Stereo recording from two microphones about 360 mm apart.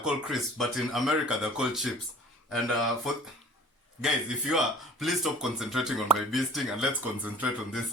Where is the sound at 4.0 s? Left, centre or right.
Centre.